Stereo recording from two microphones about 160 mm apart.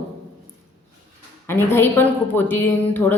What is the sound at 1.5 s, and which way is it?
Speech, 15° left (ahead or behind).